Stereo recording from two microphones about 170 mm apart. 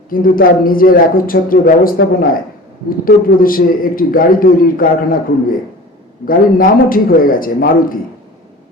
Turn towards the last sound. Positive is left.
turn(degrees=55)  # may be behind; listen again after turning